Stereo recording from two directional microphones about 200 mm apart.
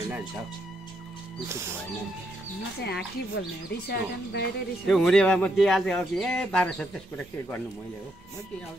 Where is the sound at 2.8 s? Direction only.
55° left (ahead or behind).